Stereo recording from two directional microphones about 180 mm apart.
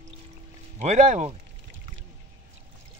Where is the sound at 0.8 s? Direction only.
40° right (ahead or behind).